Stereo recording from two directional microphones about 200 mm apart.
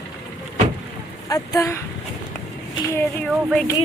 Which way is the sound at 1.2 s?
15° left (ahead or behind).